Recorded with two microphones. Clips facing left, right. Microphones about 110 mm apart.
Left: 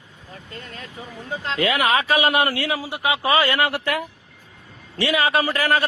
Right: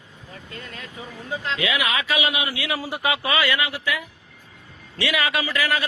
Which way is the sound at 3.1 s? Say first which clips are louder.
Left 5 dB; 35° left (ahead or behind).